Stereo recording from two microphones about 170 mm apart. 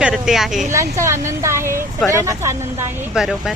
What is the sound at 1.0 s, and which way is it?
A woman's voice, 15° right (ahead or behind).